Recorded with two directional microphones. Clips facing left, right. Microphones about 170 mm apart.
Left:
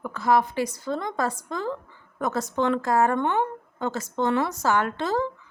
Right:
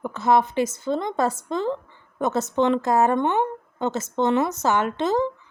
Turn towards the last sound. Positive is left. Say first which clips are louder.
# right 4 dB
turn(degrees=-20)  # may be behind; listen again after turning